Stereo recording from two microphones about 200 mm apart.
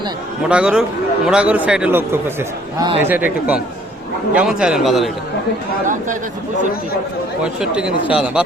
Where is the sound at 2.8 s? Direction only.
25° right (ahead or behind).